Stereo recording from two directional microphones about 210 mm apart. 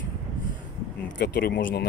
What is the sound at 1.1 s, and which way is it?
Speech, 50° left (ahead or behind).